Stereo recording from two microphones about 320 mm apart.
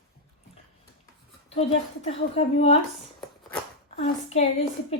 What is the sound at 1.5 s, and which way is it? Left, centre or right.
A woman's voice, centre.